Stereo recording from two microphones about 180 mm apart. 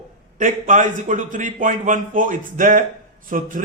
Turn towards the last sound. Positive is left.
turn(degrees=-45)  # may be behind; listen again after turning